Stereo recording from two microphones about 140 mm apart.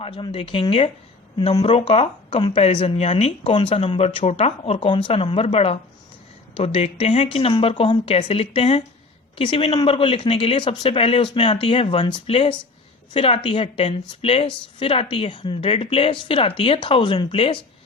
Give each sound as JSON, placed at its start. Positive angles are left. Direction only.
{"t": 0.0, "sound": "speech", "side_deg": 40}